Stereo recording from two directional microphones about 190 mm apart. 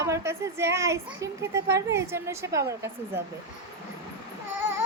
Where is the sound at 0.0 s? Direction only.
15° right (ahead or behind).